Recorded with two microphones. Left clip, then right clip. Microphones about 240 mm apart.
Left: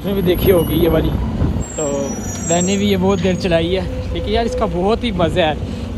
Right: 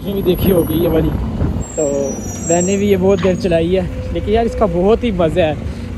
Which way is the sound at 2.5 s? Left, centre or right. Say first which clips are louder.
Right 3 dB; centre.